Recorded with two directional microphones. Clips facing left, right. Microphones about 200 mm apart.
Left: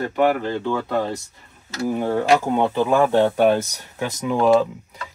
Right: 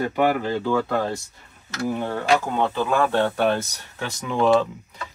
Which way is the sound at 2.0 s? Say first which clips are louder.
Left 5 dB; 15° left (ahead or behind).